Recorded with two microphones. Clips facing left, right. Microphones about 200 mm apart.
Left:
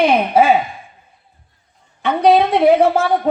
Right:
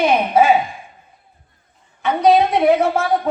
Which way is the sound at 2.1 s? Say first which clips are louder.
Left 1 dB; 30° left (ahead or behind).